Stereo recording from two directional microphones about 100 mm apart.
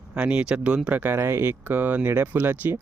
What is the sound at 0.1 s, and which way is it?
Speech, 10° right (ahead or behind).